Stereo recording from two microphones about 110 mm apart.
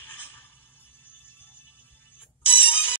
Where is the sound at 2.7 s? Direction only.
20° left (ahead or behind).